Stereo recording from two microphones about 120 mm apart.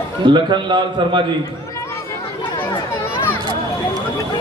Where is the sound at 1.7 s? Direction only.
20° left (ahead or behind).